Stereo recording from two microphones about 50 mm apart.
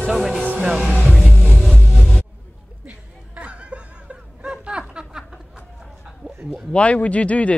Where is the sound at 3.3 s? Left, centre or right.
Right.